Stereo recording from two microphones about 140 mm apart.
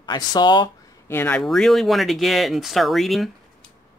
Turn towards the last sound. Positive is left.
turn(degrees=0)  # may be behind; listen again after turning